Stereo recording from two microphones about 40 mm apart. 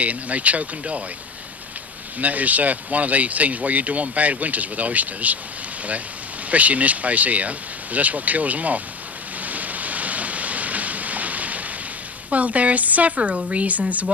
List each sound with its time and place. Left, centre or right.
0.0 s speech: right
2.1 s speech: right
6.5 s speech: right
9.4 s a sound: right
12.3 s speech: right